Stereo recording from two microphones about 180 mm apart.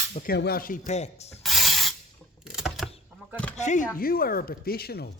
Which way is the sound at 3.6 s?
40° left (ahead or behind).